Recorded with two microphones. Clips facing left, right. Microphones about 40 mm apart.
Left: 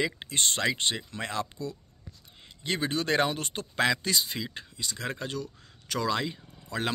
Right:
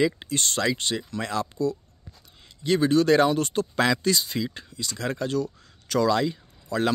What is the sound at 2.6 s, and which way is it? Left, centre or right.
Speech, left.